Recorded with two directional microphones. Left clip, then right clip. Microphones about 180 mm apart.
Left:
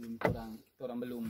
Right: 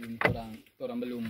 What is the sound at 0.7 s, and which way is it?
Speech, 40° left (ahead or behind).